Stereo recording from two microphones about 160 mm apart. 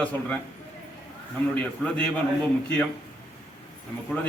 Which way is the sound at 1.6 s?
5° left (ahead or behind).